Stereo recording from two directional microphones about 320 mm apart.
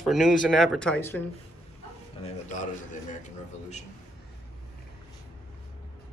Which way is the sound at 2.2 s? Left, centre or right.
Left.